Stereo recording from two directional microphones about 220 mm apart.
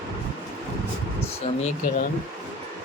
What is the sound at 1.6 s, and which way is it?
Speech, 35° left (ahead or behind).